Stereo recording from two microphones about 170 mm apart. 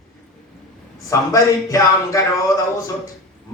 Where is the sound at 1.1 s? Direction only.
20° left (ahead or behind).